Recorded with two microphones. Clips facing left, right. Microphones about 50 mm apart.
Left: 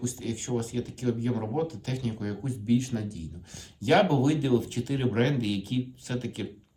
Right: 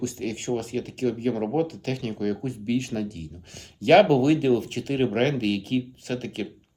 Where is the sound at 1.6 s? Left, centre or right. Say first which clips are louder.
Right 4 dB; right.